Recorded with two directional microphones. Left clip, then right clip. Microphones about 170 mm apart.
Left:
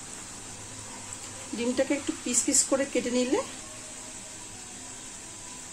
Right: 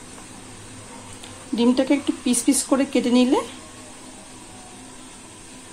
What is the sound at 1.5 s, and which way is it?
Speech, 35° right (ahead or behind).